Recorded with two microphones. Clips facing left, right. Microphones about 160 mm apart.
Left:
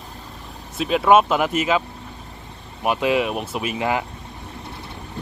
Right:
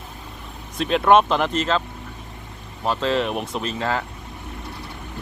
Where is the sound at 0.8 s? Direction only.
5° left (ahead or behind).